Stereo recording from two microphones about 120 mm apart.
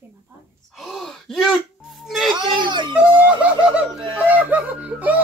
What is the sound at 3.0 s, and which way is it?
Speech, 10° right (ahead or behind).